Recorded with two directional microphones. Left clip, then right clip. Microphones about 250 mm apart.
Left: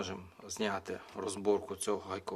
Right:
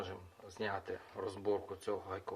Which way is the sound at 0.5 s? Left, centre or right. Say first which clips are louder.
Left 4 dB; left.